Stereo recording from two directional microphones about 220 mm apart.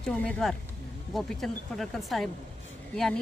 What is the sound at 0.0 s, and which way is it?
Speech, 5° left (ahead or behind).